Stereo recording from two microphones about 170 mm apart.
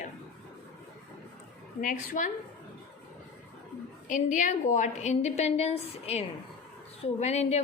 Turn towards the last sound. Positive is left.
turn(degrees=40)  # may be behind; listen again after turning